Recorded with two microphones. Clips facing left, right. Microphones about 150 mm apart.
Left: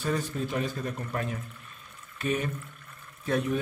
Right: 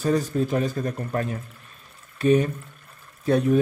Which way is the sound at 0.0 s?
40° right (ahead or behind).